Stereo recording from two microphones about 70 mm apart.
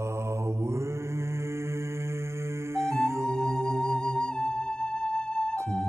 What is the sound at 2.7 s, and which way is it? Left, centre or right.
Music, right.